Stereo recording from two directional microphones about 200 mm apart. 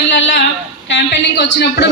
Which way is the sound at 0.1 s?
60° left (ahead or behind).